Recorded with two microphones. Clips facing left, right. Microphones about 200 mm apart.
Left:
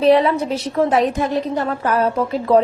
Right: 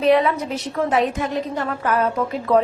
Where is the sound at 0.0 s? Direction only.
30° left (ahead or behind).